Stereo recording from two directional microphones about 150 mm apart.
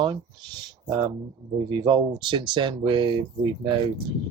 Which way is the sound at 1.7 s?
30° right (ahead or behind).